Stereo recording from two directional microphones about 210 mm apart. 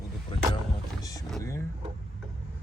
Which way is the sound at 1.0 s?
15° left (ahead or behind).